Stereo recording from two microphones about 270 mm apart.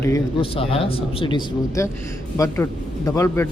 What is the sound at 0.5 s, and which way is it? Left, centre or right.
Speech, left.